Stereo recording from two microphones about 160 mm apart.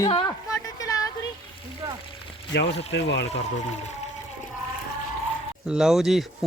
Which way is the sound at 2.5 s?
90° left.